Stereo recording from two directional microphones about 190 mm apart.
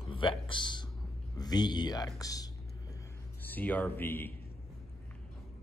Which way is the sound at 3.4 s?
10° left (ahead or behind).